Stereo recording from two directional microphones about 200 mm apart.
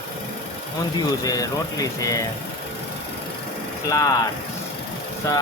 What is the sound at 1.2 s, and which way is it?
Speech, 20° left (ahead or behind).